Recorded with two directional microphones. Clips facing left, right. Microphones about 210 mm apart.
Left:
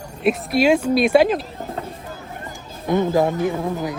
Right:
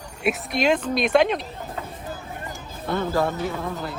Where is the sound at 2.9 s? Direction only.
15° left (ahead or behind).